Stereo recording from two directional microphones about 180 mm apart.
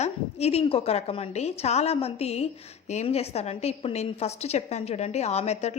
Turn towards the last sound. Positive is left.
turn(degrees=35)  # may be behind; listen again after turning